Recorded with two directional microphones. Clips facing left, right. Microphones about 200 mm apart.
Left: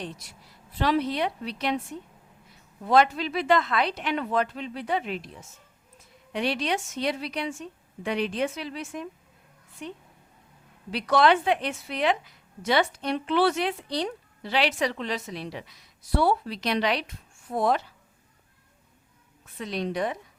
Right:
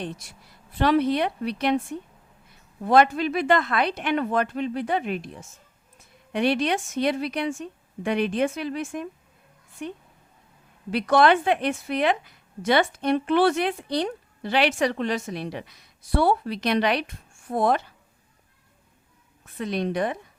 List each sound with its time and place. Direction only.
0.7 s a woman's voice: 50° right (ahead or behind)
19.5 s a woman's voice: 55° right (ahead or behind)